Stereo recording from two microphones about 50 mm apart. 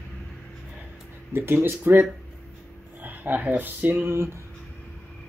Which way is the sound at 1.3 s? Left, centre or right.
Right.